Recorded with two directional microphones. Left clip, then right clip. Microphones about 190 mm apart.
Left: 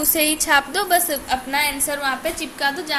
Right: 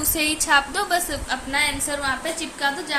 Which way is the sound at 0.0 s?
25° left (ahead or behind).